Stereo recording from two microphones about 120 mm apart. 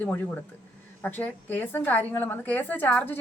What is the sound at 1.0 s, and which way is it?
A woman's voice, 15° left (ahead or behind).